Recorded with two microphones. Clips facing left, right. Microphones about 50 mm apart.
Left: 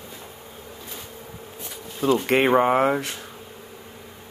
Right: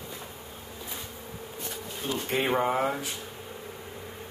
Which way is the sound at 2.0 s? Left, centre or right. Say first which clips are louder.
Left 13 dB; left.